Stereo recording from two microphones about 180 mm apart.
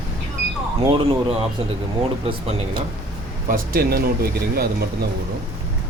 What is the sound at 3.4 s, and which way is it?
Speech, 55° right (ahead or behind).